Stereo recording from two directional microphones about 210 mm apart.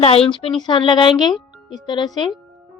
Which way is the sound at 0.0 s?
30° left (ahead or behind).